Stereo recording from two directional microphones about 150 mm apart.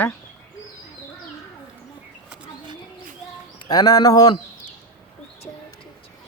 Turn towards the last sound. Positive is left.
turn(degrees=25)  # may be behind; listen again after turning